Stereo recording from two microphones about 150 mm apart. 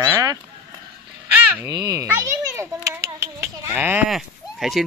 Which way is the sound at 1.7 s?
25° right (ahead or behind).